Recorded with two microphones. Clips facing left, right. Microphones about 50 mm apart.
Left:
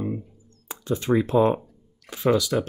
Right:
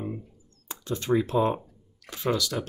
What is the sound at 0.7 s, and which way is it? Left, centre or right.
Speech, centre.